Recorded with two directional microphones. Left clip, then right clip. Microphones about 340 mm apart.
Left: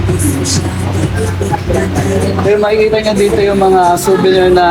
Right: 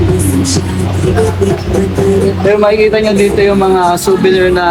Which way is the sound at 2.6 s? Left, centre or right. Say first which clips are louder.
Right 2 dB; centre.